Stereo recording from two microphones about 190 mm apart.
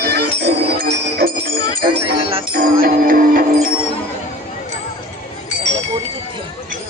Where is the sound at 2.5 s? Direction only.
50° right (ahead or behind).